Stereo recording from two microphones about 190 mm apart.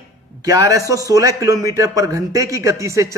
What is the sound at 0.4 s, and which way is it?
A man's voice, 20° right (ahead or behind).